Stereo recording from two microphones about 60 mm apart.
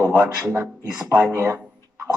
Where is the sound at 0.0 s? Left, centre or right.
Right.